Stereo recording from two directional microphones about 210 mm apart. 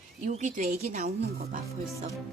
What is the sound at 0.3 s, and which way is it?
Speech, 35° right (ahead or behind).